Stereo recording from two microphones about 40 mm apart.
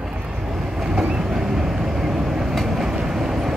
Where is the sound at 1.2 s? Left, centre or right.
Centre.